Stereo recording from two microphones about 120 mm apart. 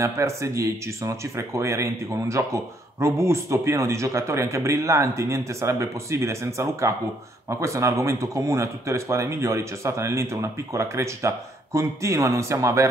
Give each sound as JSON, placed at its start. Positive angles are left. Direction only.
{"t": 0.0, "sound": "speech", "side_deg": -25}